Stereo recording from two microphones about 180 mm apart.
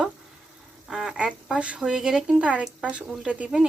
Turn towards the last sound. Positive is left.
turn(degrees=-5)  # may be behind; listen again after turning